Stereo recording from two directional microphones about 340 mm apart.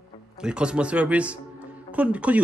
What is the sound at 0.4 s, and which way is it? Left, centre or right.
Speech, centre.